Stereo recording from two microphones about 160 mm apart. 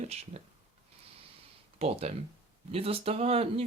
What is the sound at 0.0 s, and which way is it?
Speech, 40° right (ahead or behind).